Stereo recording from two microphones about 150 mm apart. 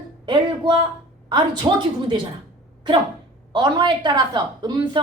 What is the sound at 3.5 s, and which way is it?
A woman's voice, 30° right (ahead or behind).